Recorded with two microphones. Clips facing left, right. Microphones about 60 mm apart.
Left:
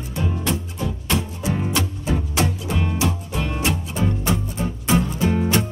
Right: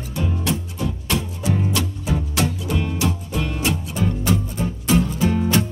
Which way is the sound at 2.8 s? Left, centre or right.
Centre.